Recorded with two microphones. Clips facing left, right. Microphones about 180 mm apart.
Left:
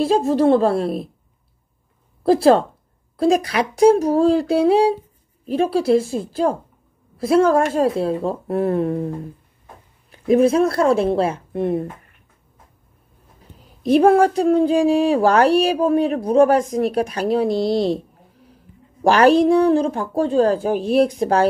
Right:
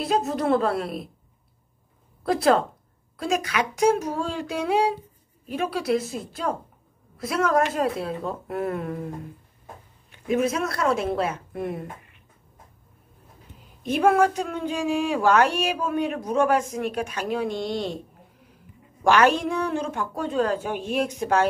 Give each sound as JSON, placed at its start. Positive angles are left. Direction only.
{"t": 0.0, "sound": "a woman's voice", "side_deg": 30}
{"t": 2.2, "sound": "a woman's voice", "side_deg": 30}
{"t": 10.1, "sound": "speech", "side_deg": 35}
{"t": 13.8, "sound": "speech", "side_deg": 35}
{"t": 19.0, "sound": "speech", "side_deg": 35}